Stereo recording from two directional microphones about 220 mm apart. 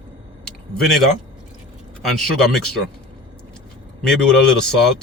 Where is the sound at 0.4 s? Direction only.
Centre (ahead or behind).